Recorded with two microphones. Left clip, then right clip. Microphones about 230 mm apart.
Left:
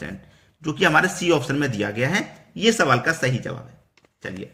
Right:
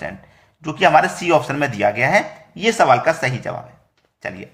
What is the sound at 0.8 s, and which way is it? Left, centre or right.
A man's voice, centre.